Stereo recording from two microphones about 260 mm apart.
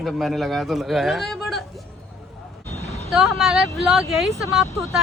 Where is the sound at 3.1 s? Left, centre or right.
Centre.